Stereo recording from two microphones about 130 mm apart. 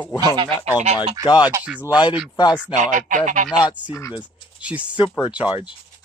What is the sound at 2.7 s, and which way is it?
Speech, 75° right (ahead or behind).